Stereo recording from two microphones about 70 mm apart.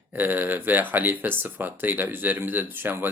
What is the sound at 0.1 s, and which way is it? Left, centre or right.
Speech, right.